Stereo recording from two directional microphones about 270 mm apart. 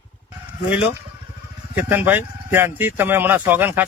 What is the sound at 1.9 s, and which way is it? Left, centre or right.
Speech, centre.